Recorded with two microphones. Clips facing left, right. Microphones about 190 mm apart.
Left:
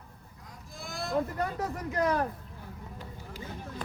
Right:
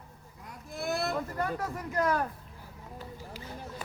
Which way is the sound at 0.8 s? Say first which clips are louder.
Right 7 dB; 65° right (ahead or behind).